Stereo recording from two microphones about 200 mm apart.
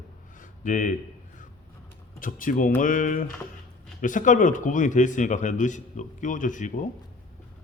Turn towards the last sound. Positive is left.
turn(degrees=40)  # may be behind; listen again after turning